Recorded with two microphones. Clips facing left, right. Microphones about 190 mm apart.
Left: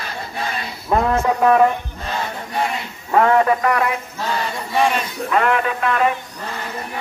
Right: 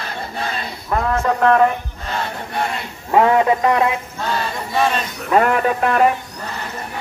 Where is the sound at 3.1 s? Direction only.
20° right (ahead or behind).